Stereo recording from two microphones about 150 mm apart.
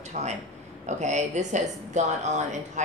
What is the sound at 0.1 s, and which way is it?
A man's voice, 50° right (ahead or behind).